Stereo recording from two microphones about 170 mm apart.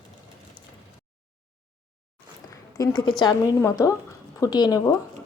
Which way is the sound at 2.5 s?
25° left (ahead or behind).